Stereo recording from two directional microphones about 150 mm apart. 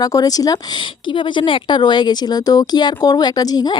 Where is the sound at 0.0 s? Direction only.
25° left (ahead or behind).